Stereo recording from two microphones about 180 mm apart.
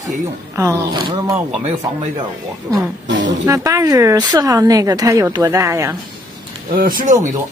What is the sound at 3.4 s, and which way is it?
Speech, 20° right (ahead or behind).